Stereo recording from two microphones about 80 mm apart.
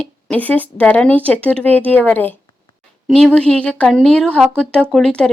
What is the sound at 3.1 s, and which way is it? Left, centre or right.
Speech, centre.